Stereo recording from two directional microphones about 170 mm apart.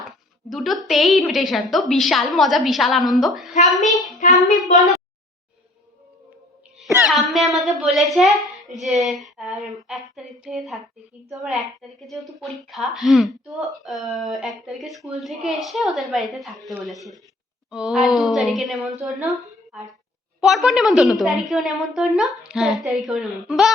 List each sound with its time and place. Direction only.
0.5 s a woman's voice: centre (ahead or behind)
3.5 s a woman's voice: 45° left (ahead or behind)
4.6 s a woman's voice: centre (ahead or behind)
7.0 s a woman's voice: centre (ahead or behind)
20.4 s a woman's voice: centre (ahead or behind)